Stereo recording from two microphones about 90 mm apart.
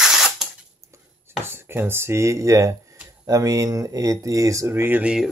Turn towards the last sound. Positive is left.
turn(degrees=-10)  # may be behind; listen again after turning